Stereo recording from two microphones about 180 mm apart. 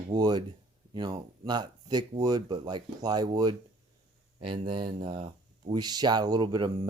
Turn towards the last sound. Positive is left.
turn(degrees=-25)  # may be behind; listen again after turning